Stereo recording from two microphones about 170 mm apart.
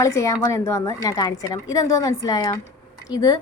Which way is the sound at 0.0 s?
15° left (ahead or behind).